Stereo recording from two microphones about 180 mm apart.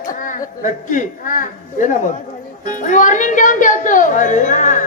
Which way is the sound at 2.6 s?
45° left (ahead or behind).